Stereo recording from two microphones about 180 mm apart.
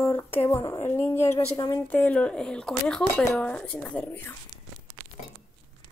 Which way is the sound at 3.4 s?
5° left (ahead or behind).